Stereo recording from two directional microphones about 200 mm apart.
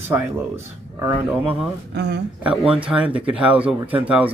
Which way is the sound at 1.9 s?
60° right (ahead or behind).